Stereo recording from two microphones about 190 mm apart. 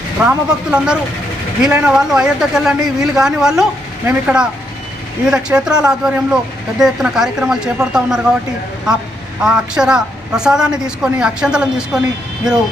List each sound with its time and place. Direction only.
0.2 s speech: 5° right (ahead or behind)
9.4 s speech: 5° right (ahead or behind)